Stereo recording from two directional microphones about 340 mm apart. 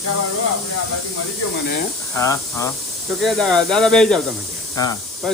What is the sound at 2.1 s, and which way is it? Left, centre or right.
Speech, centre.